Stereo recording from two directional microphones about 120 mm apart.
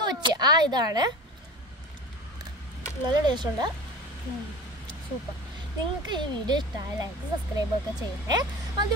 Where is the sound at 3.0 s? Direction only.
40° right (ahead or behind).